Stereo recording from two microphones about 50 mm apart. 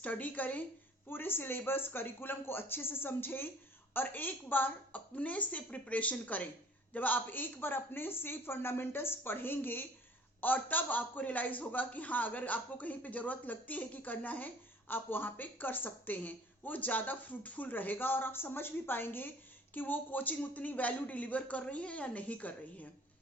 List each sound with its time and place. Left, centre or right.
0.0 s a man's voice: left
1.1 s a woman's voice: left